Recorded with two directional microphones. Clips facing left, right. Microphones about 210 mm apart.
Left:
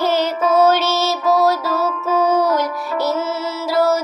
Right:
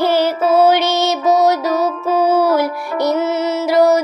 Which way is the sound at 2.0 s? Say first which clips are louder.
Right 2 dB; 10° right (ahead or behind).